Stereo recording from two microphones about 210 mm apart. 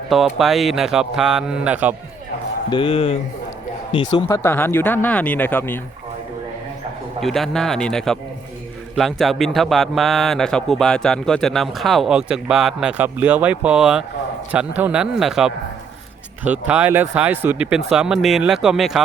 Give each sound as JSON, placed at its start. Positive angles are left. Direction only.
{"t": 0.1, "sound": "speech", "side_deg": 0}
{"t": 2.6, "sound": "a man's voice", "side_deg": 25}
{"t": 4.3, "sound": "speech", "side_deg": 10}
{"t": 7.2, "sound": "speech", "side_deg": 0}